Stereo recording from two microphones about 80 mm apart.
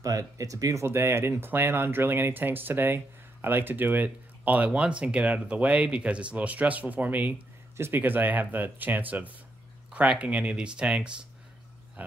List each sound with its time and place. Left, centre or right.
0.0 s speech: right; by 11.1 s centre